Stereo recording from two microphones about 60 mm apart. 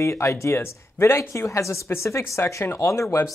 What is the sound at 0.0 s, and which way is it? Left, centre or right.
Speech, left.